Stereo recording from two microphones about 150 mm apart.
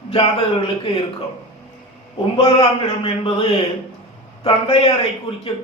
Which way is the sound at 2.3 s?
40° left (ahead or behind).